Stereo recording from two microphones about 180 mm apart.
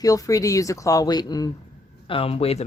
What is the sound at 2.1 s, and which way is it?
Speech, 30° left (ahead or behind).